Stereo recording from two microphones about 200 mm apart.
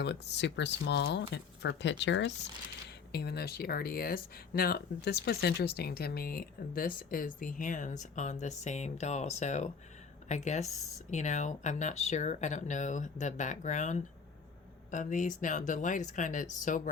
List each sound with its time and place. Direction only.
0.0 s speech: 60° left (ahead or behind)
3.1 s speech: 55° left (ahead or behind)